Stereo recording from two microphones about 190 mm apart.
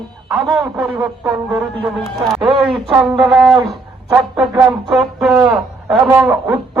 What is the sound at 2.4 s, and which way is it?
Speech, 30° right (ahead or behind).